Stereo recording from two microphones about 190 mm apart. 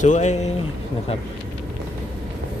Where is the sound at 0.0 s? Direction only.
40° left (ahead or behind).